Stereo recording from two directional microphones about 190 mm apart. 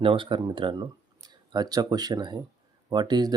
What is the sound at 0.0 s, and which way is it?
Speech, 30° right (ahead or behind).